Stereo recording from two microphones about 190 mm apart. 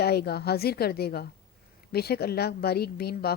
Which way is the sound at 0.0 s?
55° left (ahead or behind).